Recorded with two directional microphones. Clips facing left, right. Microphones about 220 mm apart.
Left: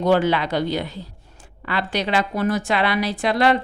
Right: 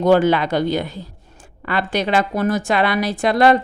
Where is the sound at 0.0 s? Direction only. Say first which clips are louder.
Right 4 dB; 45° right (ahead or behind).